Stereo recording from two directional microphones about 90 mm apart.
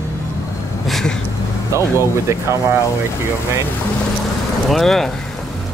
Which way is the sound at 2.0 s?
30° right (ahead or behind).